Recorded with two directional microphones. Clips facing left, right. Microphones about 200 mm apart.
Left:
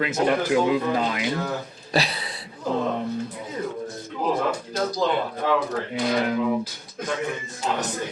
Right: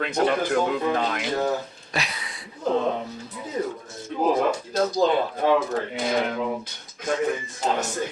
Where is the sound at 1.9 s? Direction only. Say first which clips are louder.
Left 6 dB; 35° left (ahead or behind).